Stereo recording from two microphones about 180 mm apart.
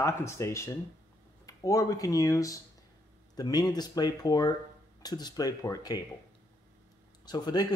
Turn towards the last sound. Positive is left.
turn(degrees=25)  # may be behind; listen again after turning